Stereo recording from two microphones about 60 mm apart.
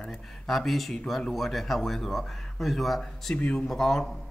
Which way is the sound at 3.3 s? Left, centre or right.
Centre.